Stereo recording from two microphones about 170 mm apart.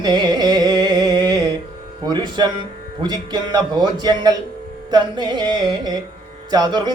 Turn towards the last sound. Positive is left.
turn(degrees=-25)  # may be behind; listen again after turning